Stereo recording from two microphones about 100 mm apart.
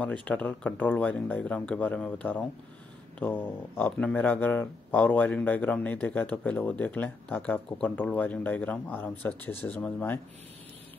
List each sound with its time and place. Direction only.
0.0 s speech: 15° left (ahead or behind)